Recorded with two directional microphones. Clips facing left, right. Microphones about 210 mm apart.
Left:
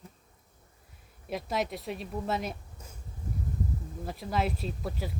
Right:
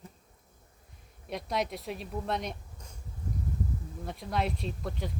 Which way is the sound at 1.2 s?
Centre (ahead or behind).